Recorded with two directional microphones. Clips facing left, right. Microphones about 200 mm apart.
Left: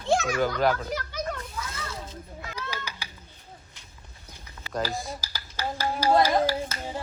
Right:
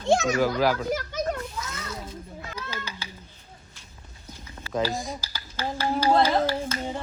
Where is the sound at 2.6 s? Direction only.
15° left (ahead or behind).